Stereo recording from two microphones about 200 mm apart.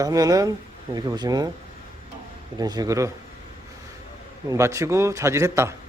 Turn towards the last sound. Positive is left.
turn(degrees=-15)  # may be behind; listen again after turning